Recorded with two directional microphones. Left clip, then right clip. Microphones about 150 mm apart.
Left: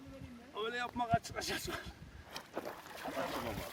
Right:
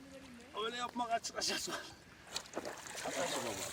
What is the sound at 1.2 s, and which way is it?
Speech, 20° right (ahead or behind).